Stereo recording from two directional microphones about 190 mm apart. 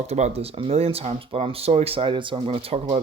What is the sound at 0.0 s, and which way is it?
Speech, 35° right (ahead or behind).